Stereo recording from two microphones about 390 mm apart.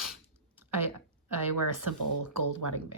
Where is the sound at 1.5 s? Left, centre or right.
Right.